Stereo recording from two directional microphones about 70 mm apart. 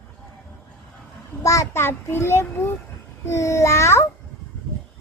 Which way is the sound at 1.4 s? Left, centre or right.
Left.